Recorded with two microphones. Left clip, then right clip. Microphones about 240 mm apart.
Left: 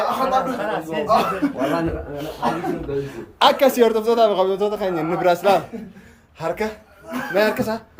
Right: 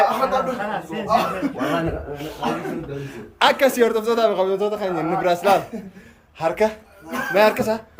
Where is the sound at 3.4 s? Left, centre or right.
Centre.